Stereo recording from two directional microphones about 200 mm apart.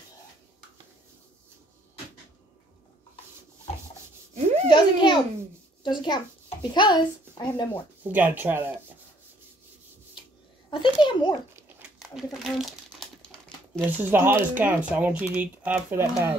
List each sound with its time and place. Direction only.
4.6 s a child's voice: 25° left (ahead or behind)
8.0 s speech: 10° right (ahead or behind)
10.7 s a child's voice: 25° left (ahead or behind)
11.5 s crumpling: 5° right (ahead or behind)
13.8 s speech: 10° right (ahead or behind)